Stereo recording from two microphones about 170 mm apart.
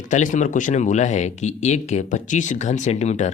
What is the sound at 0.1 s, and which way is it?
Speech, 50° left (ahead or behind).